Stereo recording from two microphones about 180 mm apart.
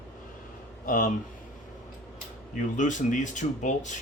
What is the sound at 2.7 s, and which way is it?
Speech, 45° left (ahead or behind).